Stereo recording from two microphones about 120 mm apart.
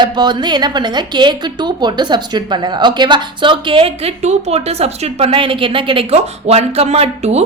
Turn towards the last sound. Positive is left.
turn(degrees=-65)  # may be behind; listen again after turning